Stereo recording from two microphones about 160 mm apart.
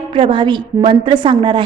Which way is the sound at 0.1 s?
30° right (ahead or behind).